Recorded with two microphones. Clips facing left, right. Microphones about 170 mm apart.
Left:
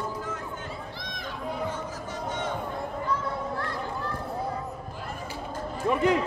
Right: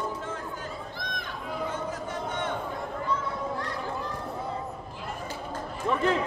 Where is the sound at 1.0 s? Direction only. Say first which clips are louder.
Right 2 dB; 50° right (ahead or behind).